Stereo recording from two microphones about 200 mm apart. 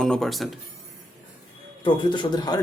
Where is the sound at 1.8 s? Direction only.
25° left (ahead or behind).